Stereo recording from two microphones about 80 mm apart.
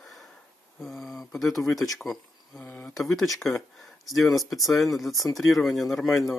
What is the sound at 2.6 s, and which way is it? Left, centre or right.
Speech, left.